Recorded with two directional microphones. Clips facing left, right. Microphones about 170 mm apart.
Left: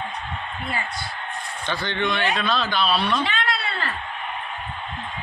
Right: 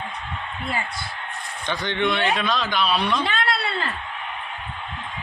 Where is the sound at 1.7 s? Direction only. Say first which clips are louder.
Right 2 dB; 15° right (ahead or behind).